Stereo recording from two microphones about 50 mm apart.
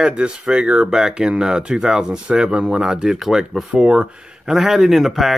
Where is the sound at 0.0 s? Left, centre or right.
Centre.